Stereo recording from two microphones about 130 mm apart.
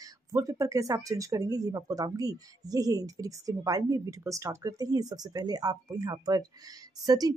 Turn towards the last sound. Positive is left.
turn(degrees=-30)  # may be behind; listen again after turning